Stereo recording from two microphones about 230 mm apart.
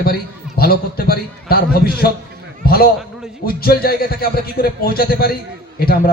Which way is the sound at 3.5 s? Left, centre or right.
Left.